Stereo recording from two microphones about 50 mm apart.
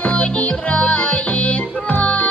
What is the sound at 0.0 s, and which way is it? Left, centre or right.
Music, left.